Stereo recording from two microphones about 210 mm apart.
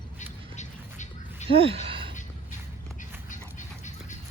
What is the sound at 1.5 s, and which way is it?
Speech, 25° right (ahead or behind).